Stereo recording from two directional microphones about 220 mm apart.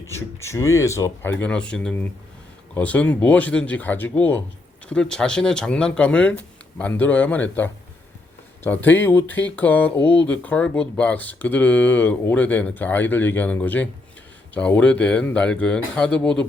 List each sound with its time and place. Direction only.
0.1 s speech: 10° left (ahead or behind)